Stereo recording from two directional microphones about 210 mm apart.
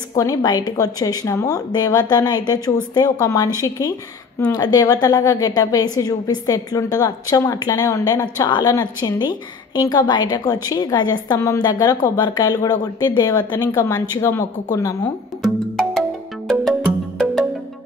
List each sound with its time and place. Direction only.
0.1 s a woman's voice: 15° left (ahead or behind)
15.4 s music: centre (ahead or behind)